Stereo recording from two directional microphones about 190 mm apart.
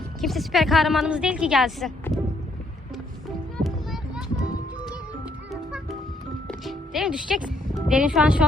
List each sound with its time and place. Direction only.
0.2 s a woman's voice: centre (ahead or behind)
3.6 s music: centre (ahead or behind)
5.5 s music: centre (ahead or behind)
7.4 s speech: 5° right (ahead or behind)